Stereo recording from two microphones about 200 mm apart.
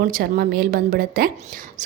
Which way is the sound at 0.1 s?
45° right (ahead or behind).